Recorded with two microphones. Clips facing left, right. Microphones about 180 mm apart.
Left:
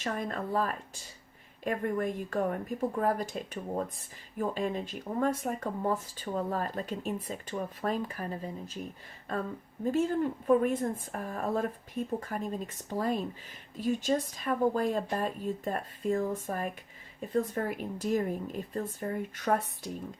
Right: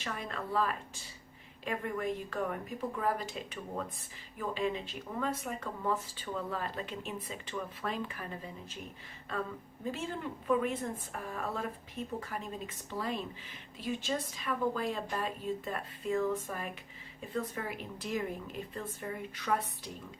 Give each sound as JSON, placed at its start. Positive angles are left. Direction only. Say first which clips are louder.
{"t": 0.0, "sound": "a woman's voice", "louder": "left 6 dB", "side_deg": 45}
{"t": 9.8, "sound": "a woman's voice", "louder": "left 10 dB", "side_deg": 45}